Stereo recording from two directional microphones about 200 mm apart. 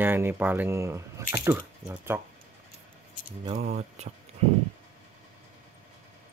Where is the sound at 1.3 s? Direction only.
15° right (ahead or behind).